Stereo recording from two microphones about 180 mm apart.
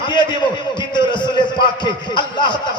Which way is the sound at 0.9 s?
25° left (ahead or behind).